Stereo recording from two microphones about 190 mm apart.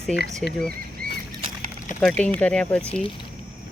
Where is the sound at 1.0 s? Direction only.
50° right (ahead or behind).